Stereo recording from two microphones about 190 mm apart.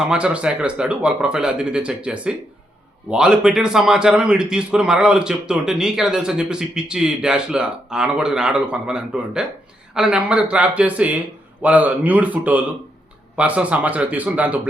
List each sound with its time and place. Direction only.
0.1 s a man's voice: 5° right (ahead or behind)